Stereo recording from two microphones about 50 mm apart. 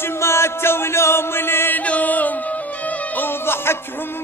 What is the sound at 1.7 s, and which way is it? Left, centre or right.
Music, left.